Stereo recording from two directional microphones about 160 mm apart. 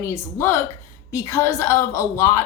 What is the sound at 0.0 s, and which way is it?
A woman's voice, 15° left (ahead or behind).